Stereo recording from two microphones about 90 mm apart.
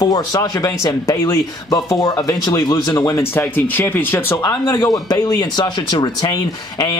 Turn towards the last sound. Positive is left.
turn(degrees=45)  # may be behind; listen again after turning